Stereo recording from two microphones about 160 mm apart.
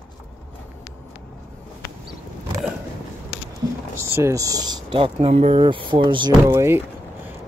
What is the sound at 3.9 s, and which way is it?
Speech, 15° right (ahead or behind).